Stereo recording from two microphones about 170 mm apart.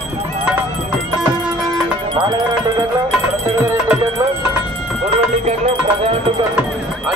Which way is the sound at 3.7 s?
15° right (ahead or behind).